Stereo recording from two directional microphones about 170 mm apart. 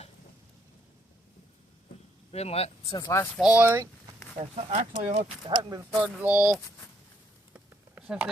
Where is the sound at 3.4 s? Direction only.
10° right (ahead or behind).